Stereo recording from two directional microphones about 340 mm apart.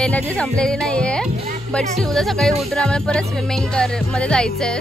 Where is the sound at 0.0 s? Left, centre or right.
Centre.